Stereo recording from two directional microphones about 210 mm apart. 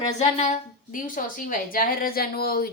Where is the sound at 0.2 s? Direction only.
35° left (ahead or behind).